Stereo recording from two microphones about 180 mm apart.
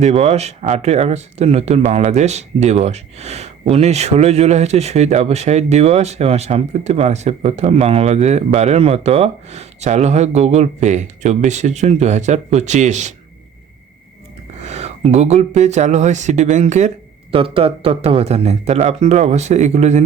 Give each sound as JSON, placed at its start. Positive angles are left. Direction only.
{"t": 0.0, "sound": "speech", "side_deg": -35}
{"t": 14.5, "sound": "speech", "side_deg": -40}
{"t": 17.3, "sound": "speech", "side_deg": -30}